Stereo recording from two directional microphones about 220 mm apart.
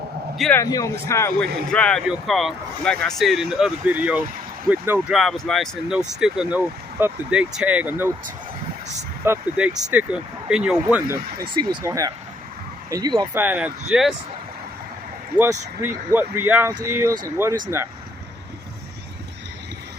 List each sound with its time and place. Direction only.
0.3 s a man's voice: centre (ahead or behind)
0.6 s a man's voice: 15° left (ahead or behind)
1.5 s a man's voice: 45° right (ahead or behind)
1.7 s speech: 5° left (ahead or behind)
9.2 s speech: 10° right (ahead or behind)
11.4 s speech: 20° right (ahead or behind)
13.4 s speech: 5° right (ahead or behind)
15.4 s speech: 10° right (ahead or behind)